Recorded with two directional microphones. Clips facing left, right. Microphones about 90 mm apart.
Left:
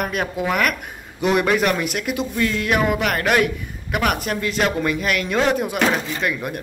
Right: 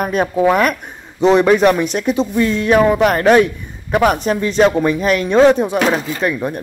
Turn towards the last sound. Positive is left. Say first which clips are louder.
# right 5 dB
turn(degrees=-30)  # may be behind; listen again after turning